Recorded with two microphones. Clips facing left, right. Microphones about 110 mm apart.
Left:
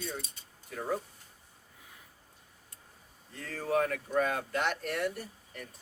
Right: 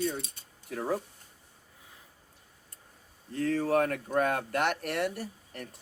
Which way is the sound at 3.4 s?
65° right (ahead or behind).